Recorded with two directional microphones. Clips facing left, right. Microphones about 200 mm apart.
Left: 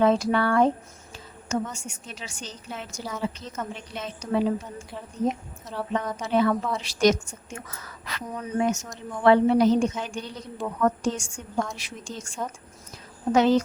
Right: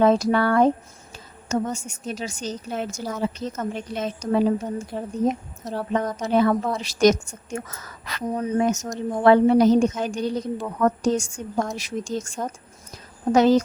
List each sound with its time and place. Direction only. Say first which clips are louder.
0.0 s a woman's voice: right 3 dB; 40° right (ahead or behind)
1.9 s a woman's voice: right 10 dB; 40° right (ahead or behind)